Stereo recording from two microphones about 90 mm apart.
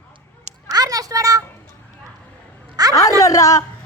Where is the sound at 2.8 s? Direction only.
45° right (ahead or behind).